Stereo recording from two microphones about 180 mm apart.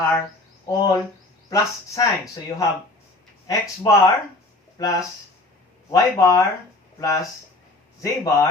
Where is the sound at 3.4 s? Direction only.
20° left (ahead or behind).